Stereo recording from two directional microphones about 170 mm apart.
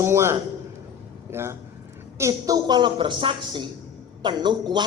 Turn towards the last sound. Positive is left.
turn(degrees=-25)  # may be behind; listen again after turning